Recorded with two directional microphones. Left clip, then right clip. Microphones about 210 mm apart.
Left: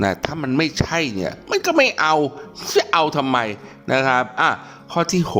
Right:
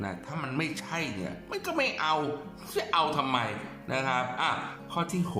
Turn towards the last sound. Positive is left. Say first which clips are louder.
# left 12 dB
turn(degrees=45)  # may be behind; listen again after turning